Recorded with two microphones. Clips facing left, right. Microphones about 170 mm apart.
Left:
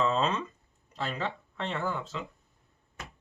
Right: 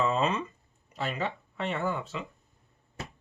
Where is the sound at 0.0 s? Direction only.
10° right (ahead or behind).